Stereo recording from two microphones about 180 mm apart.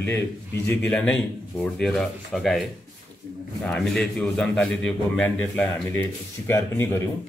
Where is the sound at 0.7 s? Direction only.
5° left (ahead or behind).